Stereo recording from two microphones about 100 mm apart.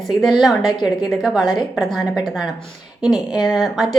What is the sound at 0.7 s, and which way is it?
Speech, 45° left (ahead or behind).